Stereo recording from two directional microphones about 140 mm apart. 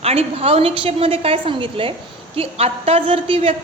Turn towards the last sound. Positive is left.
turn(degrees=-45)  # may be behind; listen again after turning